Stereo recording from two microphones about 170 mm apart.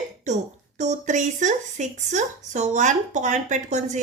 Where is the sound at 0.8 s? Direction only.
45° right (ahead or behind).